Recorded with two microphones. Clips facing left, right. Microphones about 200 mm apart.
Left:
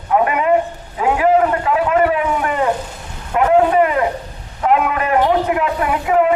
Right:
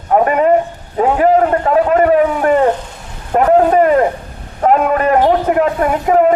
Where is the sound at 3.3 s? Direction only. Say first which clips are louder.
Right 3 dB; 40° right (ahead or behind).